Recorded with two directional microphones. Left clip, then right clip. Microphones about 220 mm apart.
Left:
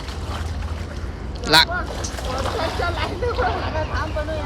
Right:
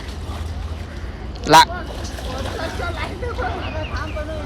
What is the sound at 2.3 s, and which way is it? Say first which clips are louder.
Vehicle: left 4 dB; 15° left (ahead or behind).